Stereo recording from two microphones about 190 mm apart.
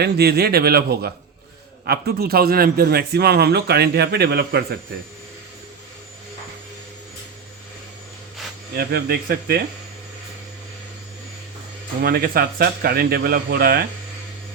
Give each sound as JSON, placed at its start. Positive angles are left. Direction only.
{"t": 0.0, "sound": "a man's voice", "side_deg": -55}
{"t": 8.7, "sound": "a man's voice", "side_deg": -55}
{"t": 12.0, "sound": "speech", "side_deg": -55}